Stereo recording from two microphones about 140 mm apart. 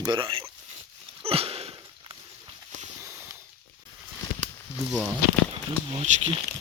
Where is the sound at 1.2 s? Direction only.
45° right (ahead or behind).